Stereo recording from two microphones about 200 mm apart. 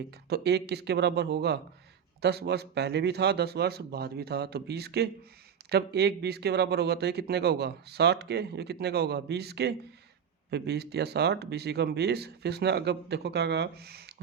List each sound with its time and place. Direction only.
0.3 s speech: 55° right (ahead or behind)